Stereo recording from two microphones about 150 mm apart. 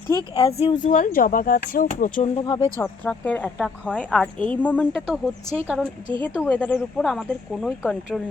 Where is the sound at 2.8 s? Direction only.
10° left (ahead or behind).